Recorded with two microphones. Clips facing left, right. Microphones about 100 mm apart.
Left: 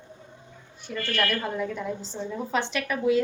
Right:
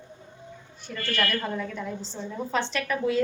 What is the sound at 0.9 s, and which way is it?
A woman's voice, 10° left (ahead or behind).